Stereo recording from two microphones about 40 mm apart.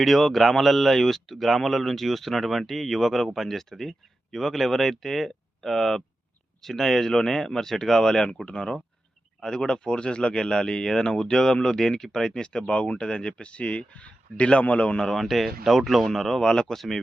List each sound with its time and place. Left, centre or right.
0.0 s speech: centre; by 14.9 s left
15.1 s speech: centre
16.4 s speech: centre
16.7 s speech: centre